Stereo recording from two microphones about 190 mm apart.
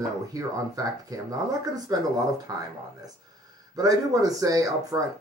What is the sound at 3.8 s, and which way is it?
Speech, 20° right (ahead or behind).